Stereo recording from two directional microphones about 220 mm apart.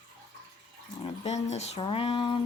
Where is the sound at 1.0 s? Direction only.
30° left (ahead or behind).